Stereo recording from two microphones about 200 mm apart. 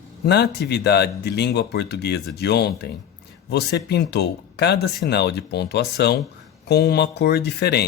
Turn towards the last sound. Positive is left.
turn(degrees=55)  # may be behind; listen again after turning